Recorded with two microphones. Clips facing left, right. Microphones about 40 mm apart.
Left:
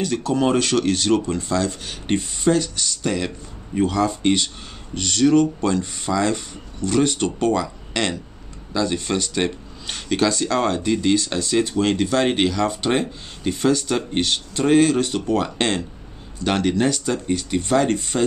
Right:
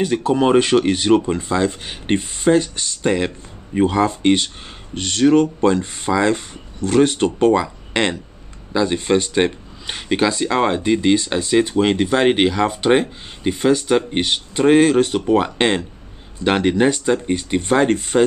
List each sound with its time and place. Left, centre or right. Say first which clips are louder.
0.0 s speech: right 4 dB; right